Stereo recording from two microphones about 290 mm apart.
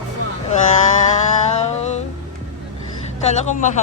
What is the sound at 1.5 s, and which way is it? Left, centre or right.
Music, left.